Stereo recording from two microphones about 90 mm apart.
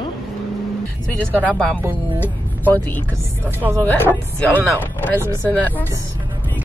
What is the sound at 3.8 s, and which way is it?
Speech, 20° left (ahead or behind).